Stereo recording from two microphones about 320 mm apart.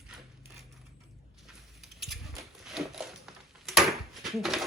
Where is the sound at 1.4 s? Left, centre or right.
Centre.